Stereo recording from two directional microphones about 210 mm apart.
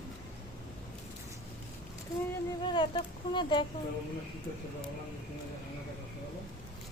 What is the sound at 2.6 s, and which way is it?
A woman's voice, 20° left (ahead or behind).